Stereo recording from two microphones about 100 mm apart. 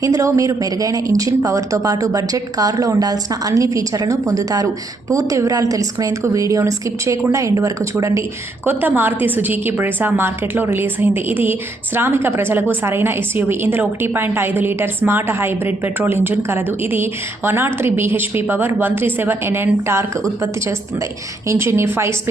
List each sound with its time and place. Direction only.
0.0 s speech: 35° right (ahead or behind)
8.6 s a woman's voice: 20° right (ahead or behind)
21.4 s a woman's voice: 30° right (ahead or behind)